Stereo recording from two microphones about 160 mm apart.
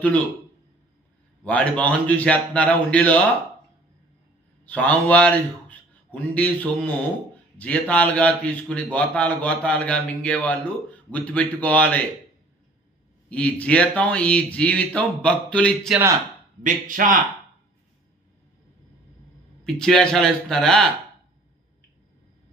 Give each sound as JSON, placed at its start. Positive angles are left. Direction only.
{"t": 1.4, "sound": "a man's voice", "side_deg": 10}
{"t": 4.6, "sound": "a man's voice", "side_deg": 10}
{"t": 13.3, "sound": "a man's voice", "side_deg": 10}
{"t": 16.6, "sound": "speech", "side_deg": -55}
{"t": 19.6, "sound": "a man's voice", "side_deg": 5}